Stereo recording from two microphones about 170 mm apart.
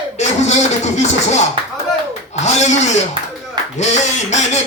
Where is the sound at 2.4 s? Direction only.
45° left (ahead or behind).